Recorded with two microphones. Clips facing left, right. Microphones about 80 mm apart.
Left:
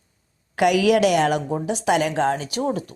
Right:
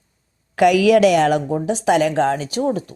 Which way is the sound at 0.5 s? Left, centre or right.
Right.